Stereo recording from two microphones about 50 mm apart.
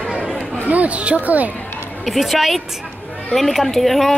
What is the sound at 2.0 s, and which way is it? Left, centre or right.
Speech, centre.